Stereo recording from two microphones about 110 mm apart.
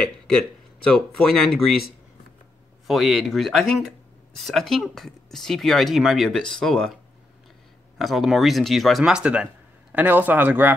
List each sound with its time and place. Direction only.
0.8 s speech: 5° left (ahead or behind)
2.9 s speech: centre (ahead or behind)
8.0 s speech: centre (ahead or behind)